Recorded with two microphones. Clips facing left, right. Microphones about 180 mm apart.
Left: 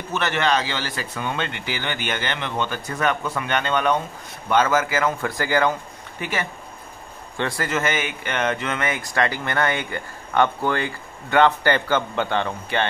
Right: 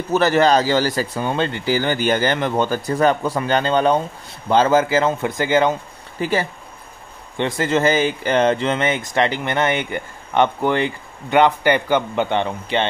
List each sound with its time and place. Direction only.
0.1 s speech: 35° right (ahead or behind); by 5.8 s 20° right (ahead or behind)
6.1 s speech: 35° right (ahead or behind)
7.3 s speech: 20° right (ahead or behind)